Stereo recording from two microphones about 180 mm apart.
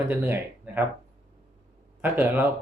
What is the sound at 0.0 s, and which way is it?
Speech, 10° right (ahead or behind).